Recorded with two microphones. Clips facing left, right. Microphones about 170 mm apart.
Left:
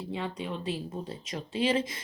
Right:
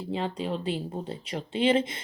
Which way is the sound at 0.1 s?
30° right (ahead or behind).